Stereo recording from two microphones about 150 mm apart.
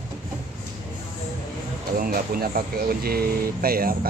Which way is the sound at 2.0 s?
80° right.